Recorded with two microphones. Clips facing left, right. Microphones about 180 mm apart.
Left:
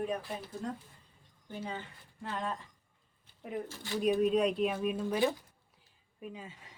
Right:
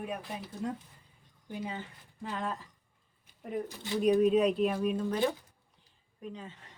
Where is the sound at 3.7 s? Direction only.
20° right (ahead or behind).